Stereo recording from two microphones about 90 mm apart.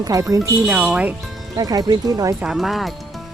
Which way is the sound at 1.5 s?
45° right (ahead or behind).